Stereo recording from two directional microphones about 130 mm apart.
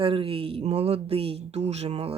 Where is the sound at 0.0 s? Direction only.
45° right (ahead or behind).